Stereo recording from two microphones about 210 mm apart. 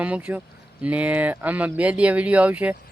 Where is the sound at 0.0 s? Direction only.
5° right (ahead or behind).